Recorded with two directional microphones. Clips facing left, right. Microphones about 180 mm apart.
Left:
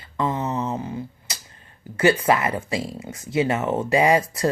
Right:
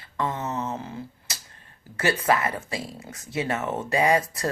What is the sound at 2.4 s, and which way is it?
Speech, 15° left (ahead or behind).